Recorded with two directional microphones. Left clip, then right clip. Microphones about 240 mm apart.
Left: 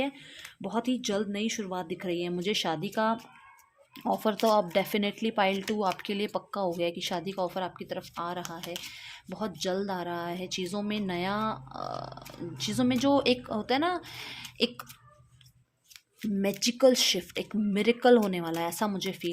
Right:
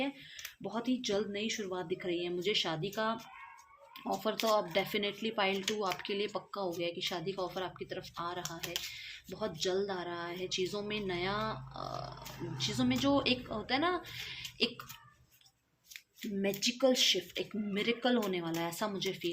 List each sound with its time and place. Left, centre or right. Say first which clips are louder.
0.0 s speech: left 5 dB; left
16.4 s speech: left 7 dB; left